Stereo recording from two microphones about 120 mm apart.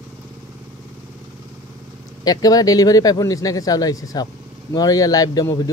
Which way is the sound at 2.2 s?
30° left (ahead or behind).